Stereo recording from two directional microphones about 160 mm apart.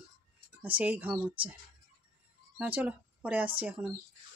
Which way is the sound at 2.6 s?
10° right (ahead or behind).